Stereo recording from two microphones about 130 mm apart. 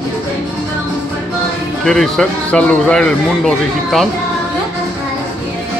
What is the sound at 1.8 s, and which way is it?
Speech, 5° left (ahead or behind).